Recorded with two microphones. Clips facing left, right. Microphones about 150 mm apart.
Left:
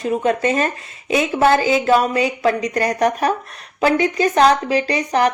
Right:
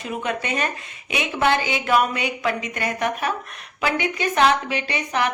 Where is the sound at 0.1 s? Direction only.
40° left (ahead or behind).